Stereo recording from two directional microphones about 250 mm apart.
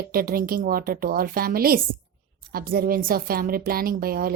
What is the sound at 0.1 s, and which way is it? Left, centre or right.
A woman's voice, right.